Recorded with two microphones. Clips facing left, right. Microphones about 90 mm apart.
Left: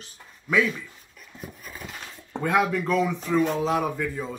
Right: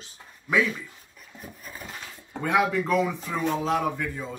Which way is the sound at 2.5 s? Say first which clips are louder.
Even; 5° right (ahead or behind).